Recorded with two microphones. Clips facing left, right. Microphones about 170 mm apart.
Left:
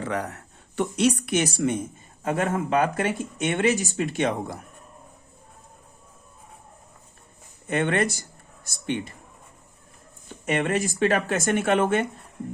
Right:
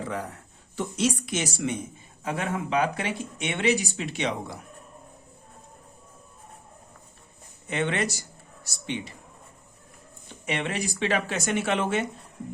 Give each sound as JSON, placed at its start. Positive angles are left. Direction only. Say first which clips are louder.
{"t": 0.0, "sound": "speech", "louder": "left 4 dB", "side_deg": 75}
{"t": 7.7, "sound": "speech", "louder": "left 4 dB", "side_deg": 50}
{"t": 10.2, "sound": "speech", "louder": "left 5 dB", "side_deg": 50}